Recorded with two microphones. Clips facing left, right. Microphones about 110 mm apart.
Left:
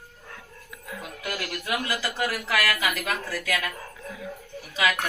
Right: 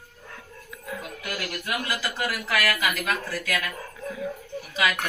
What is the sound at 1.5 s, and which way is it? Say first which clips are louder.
Speech: left 1 dB; 25° left (ahead or behind).